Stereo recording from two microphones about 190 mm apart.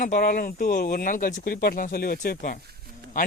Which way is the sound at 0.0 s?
45° left (ahead or behind).